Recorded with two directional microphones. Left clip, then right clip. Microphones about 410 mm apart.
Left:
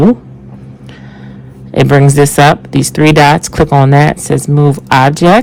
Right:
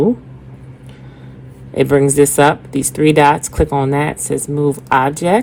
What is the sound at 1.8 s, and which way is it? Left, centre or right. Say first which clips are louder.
Speech: left 3 dB; left.